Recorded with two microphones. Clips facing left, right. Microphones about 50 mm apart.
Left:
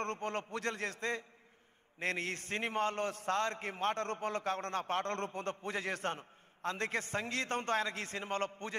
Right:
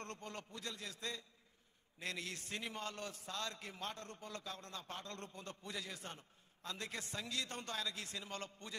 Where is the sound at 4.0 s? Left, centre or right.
Left.